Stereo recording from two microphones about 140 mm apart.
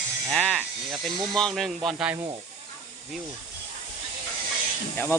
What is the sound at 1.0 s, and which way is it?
Speech, 30° right (ahead or behind).